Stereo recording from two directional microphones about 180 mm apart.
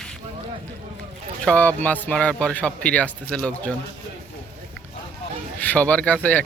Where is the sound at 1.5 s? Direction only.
10° left (ahead or behind).